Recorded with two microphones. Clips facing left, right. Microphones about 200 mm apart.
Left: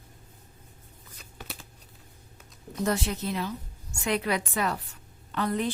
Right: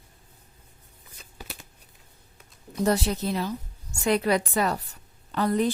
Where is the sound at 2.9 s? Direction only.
35° right (ahead or behind).